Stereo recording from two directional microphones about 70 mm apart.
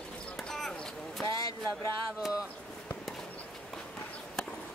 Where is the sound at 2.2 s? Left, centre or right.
Centre.